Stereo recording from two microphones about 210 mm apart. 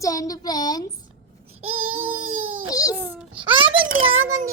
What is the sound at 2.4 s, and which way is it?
Baby cry, 75° right (ahead or behind).